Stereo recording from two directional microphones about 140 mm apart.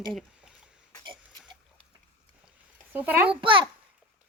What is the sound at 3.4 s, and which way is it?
Speech, 35° right (ahead or behind).